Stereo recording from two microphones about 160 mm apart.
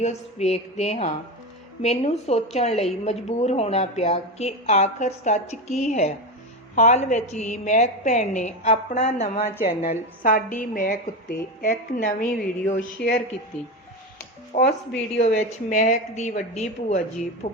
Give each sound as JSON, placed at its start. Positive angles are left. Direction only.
{"t": 0.0, "sound": "a woman's voice", "side_deg": 40}
{"t": 12.8, "sound": "speech", "side_deg": 80}
{"t": 14.5, "sound": "a woman's voice", "side_deg": 45}